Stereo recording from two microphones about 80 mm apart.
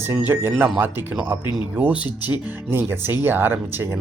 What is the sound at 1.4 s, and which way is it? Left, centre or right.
Speech, left.